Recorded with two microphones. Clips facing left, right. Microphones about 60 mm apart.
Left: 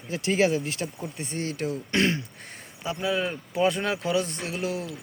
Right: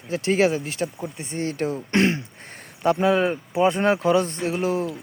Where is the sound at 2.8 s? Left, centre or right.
Right.